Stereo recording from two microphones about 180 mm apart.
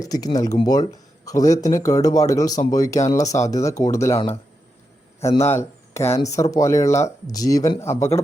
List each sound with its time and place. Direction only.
0.0 s speech: 20° left (ahead or behind)
5.5 s speech: 15° left (ahead or behind)